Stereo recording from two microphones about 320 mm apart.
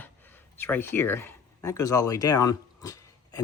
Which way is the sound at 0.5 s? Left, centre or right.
Centre.